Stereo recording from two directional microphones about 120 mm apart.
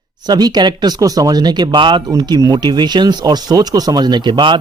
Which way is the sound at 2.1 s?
30° right (ahead or behind).